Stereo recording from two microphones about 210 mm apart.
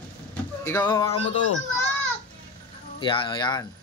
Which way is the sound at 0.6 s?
10° left (ahead or behind).